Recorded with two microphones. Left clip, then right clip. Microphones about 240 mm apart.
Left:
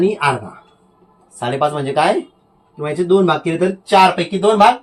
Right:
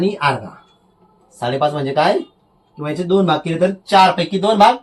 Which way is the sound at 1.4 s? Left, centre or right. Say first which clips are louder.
Even; left.